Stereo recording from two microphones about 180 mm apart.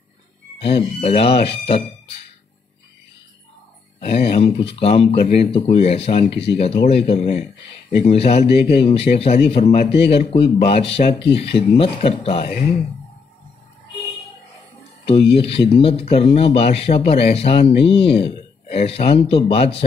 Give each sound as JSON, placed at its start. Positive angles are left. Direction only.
{"t": 0.6, "sound": "speech", "side_deg": 35}
{"t": 4.0, "sound": "speech", "side_deg": 35}
{"t": 15.0, "sound": "speech", "side_deg": 35}